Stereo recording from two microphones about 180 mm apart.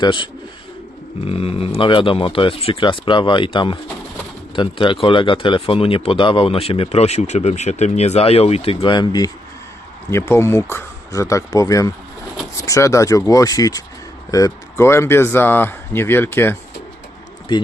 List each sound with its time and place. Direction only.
0.0 s speech: 25° left (ahead or behind)
1.3 s speech: 30° left (ahead or behind); by 16.6 s 10° left (ahead or behind)
17.5 s a man's voice: 25° left (ahead or behind)